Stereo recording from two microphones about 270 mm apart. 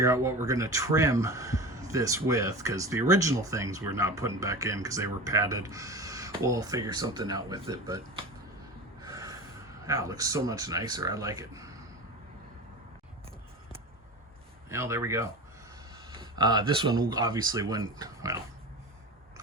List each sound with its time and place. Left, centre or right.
0.0 s speech: centre
9.0 s snort: centre
9.8 s speech: centre
14.7 s speech: centre
16.3 s speech: centre